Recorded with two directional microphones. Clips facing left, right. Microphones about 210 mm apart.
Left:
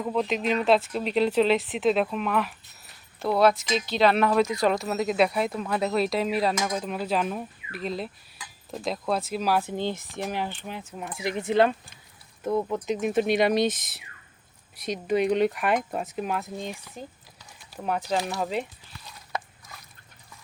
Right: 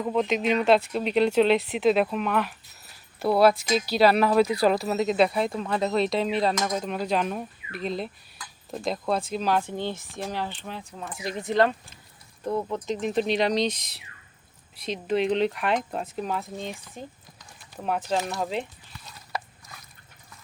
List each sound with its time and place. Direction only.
0.0 s speech: centre (ahead or behind); by 11.4 s 20° left (ahead or behind)
11.4 s speech: 5° left (ahead or behind)
15.1 s speech: 5° left (ahead or behind)
17.7 s speech: centre (ahead or behind)